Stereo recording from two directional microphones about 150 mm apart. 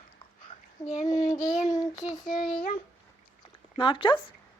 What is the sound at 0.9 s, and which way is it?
Speech, 50° left (ahead or behind).